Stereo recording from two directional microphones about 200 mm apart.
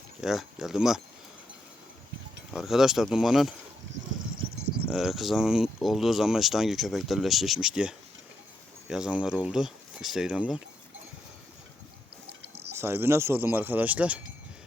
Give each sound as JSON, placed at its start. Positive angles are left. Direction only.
{"t": 0.2, "sound": "speech", "side_deg": 0}
{"t": 2.5, "sound": "speech", "side_deg": 0}
{"t": 4.9, "sound": "speech", "side_deg": 0}
{"t": 12.4, "sound": "a sound", "side_deg": -55}
{"t": 12.7, "sound": "speech", "side_deg": -10}